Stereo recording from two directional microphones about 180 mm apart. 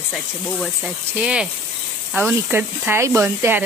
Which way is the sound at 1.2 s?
5° right (ahead or behind).